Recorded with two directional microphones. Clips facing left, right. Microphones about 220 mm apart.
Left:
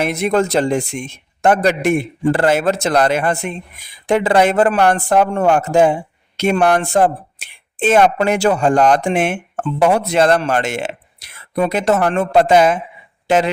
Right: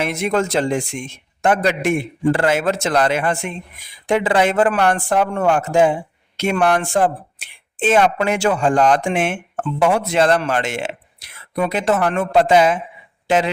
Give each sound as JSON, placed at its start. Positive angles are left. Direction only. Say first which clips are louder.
{"t": 0.0, "sound": "a man's voice", "louder": "left 3 dB", "side_deg": 35}